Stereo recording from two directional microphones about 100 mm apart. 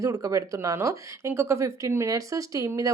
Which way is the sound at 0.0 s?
35° right (ahead or behind).